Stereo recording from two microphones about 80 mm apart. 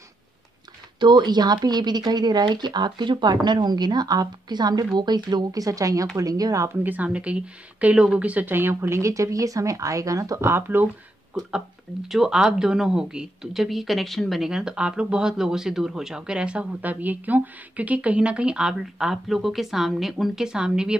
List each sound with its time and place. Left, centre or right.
0.9 s a woman's voice: right
6.8 s speech: right
12.1 s a woman's voice: centre